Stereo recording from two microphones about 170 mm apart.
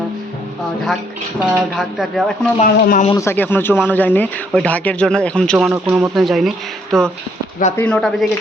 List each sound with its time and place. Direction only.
1.8 s speech: centre (ahead or behind)
2.6 s speech: 40° left (ahead or behind)
3.2 s speech: 15° left (ahead or behind)
5.7 s speech: 10° right (ahead or behind); by 8.3 s 5° left (ahead or behind)